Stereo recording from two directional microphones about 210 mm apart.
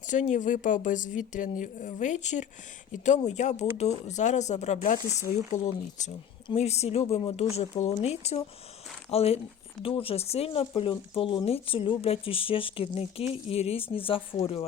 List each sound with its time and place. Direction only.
0.1 s speech: 35° left (ahead or behind)